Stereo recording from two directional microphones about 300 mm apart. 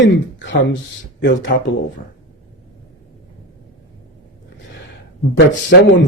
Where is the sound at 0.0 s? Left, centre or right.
Left.